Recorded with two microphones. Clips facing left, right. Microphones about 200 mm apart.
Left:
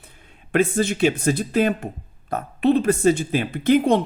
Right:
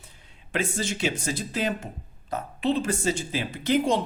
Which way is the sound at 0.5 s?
55° left (ahead or behind).